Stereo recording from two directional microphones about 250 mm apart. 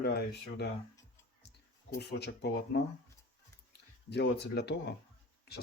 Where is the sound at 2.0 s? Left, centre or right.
Left.